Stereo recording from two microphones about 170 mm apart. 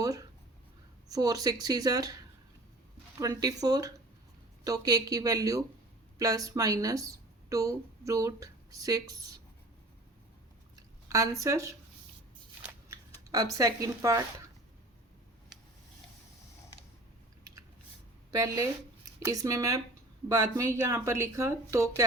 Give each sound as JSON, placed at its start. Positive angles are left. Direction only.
{"t": 0.0, "sound": "a sound", "side_deg": -20}
{"t": 1.0, "sound": "speech", "side_deg": -20}
{"t": 3.2, "sound": "a woman's voice", "side_deg": -20}
{"t": 10.8, "sound": "speech", "side_deg": -20}
{"t": 13.3, "sound": "speech", "side_deg": -20}
{"t": 18.3, "sound": "a woman's voice", "side_deg": -20}